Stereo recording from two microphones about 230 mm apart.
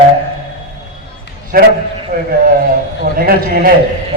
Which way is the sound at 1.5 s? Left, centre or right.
Right.